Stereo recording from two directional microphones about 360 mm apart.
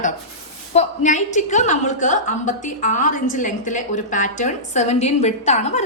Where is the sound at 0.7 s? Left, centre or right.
Centre.